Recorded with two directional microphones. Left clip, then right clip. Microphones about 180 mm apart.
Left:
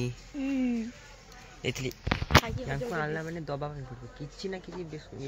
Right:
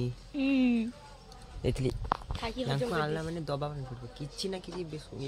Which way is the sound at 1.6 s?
45° right (ahead or behind).